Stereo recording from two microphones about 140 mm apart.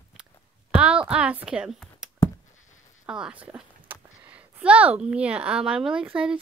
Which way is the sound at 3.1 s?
5° right (ahead or behind).